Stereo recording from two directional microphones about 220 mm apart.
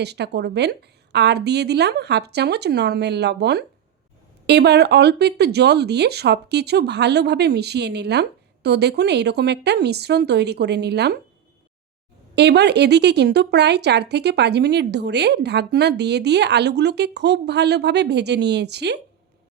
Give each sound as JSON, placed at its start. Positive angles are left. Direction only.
{"t": 0.0, "sound": "speech", "side_deg": -50}
{"t": 12.4, "sound": "speech", "side_deg": -50}